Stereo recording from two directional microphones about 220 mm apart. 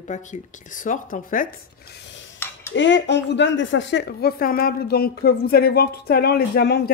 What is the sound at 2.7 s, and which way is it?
A woman's voice, 55° left (ahead or behind).